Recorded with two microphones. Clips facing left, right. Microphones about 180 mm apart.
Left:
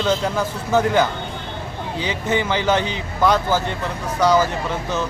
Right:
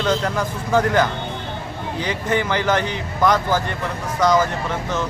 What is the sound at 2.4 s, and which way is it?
Speech, 20° left (ahead or behind).